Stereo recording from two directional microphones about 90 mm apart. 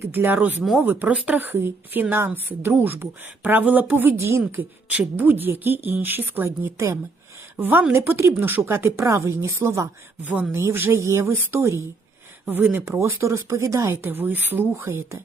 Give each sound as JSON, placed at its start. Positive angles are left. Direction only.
{"t": 0.1, "sound": "a woman's voice", "side_deg": -25}
{"t": 13.0, "sound": "speech", "side_deg": -30}